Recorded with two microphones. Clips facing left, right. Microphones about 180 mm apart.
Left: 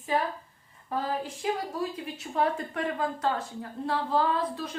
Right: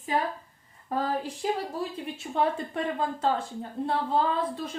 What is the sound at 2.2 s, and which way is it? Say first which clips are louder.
A woman's voice: right 1 dB; 25° right (ahead or behind).